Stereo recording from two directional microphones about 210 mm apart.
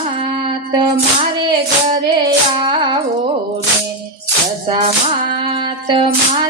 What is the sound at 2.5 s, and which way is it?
Carnatic music, 25° right (ahead or behind).